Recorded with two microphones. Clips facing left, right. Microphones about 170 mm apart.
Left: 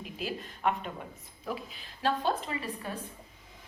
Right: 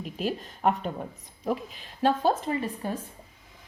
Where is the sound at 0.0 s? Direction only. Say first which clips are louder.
Right 6 dB; 40° right (ahead or behind).